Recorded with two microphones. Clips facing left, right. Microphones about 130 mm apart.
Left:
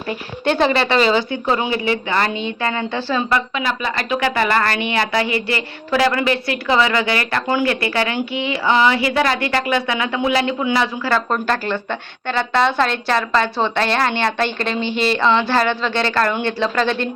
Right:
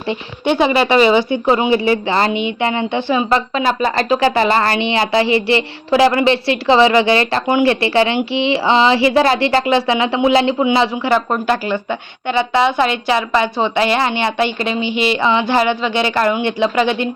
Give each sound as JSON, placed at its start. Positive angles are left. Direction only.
{"t": 0.4, "sound": "speech", "side_deg": -10}
{"t": 2.3, "sound": "a woman's voice", "side_deg": -15}
{"t": 3.5, "sound": "a woman's voice", "side_deg": -35}